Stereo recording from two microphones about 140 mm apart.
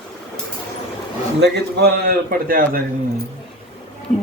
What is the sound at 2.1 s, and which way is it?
Speech, 90° right.